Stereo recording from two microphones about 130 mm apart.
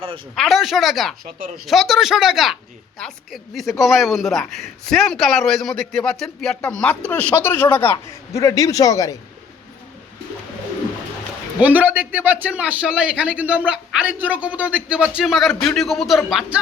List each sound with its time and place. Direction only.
0.3 s speech: centre (ahead or behind); by 9.1 s 25° left (ahead or behind)
11.6 s a man's voice: 10° right (ahead or behind)